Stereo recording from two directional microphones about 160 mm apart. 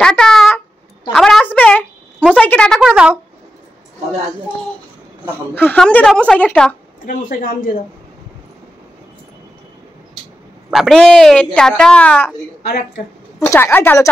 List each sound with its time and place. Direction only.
0.0 s speech: 5° left (ahead or behind)
1.1 s a sound: 5° left (ahead or behind)
2.4 s a woman's voice: 5° left (ahead or behind)
2.9 s speech: 10° right (ahead or behind)
5.5 s a woman's voice: 10° left (ahead or behind)
7.1 s a man's voice: 65° left (ahead or behind)
10.7 s a woman's voice: centre (ahead or behind)
12.6 s speech: 80° left
13.4 s a woman's voice: 10° left (ahead or behind)